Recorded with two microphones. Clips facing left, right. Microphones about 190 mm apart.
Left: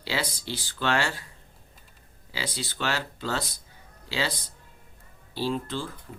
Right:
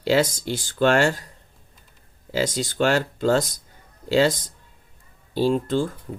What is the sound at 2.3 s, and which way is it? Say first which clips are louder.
Speech: right 11 dB; 45° right (ahead or behind).